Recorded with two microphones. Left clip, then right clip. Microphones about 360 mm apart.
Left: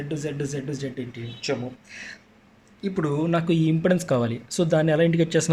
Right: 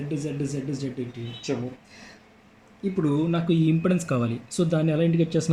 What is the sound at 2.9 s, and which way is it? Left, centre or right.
Speech, left.